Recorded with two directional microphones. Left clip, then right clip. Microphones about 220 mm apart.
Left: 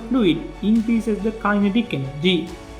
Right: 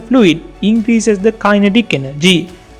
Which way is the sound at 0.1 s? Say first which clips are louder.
Right 9 dB; 30° right (ahead or behind).